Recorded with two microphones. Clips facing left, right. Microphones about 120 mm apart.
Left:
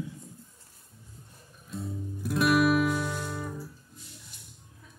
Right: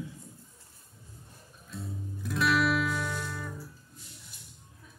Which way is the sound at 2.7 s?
45° left (ahead or behind).